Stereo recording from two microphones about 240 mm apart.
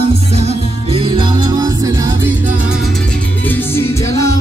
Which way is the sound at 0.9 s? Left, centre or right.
Centre.